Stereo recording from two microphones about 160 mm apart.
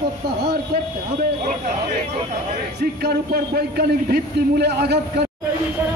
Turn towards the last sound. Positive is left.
turn(degrees=-90)